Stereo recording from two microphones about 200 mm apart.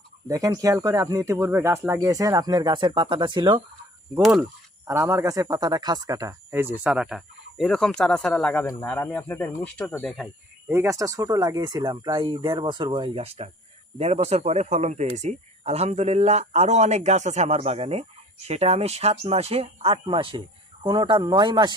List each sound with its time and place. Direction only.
0.3 s speech: 15° right (ahead or behind)
4.2 s speech: centre (ahead or behind)
4.9 s speech: 15° right (ahead or behind); by 10.2 s 5° left (ahead or behind)
10.7 s speech: 15° right (ahead or behind)